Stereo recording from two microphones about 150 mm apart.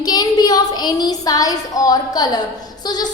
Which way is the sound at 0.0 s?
25° left (ahead or behind).